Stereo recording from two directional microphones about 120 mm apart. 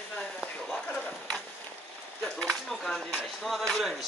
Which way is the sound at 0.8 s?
10° left (ahead or behind).